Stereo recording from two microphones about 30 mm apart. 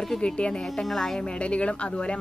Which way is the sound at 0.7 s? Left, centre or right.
Centre.